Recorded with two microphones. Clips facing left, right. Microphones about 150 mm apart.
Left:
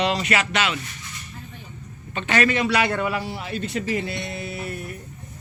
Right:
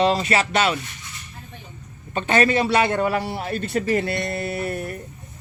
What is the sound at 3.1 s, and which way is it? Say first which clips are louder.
Speech: right 4 dB; 55° right (ahead or behind).